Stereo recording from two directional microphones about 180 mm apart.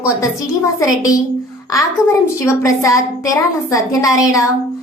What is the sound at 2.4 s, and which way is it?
A woman's voice, 15° left (ahead or behind).